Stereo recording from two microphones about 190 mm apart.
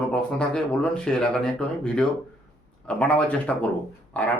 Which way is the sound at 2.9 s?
5° left (ahead or behind).